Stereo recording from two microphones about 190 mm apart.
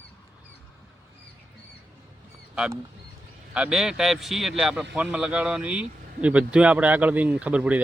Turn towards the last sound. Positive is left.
turn(degrees=-5)  # may be behind; listen again after turning